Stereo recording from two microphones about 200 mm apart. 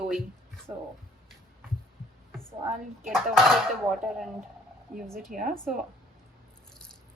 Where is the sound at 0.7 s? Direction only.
15° right (ahead or behind).